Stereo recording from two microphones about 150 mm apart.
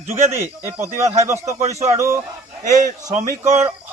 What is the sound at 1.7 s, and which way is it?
Speech, 50° right (ahead or behind).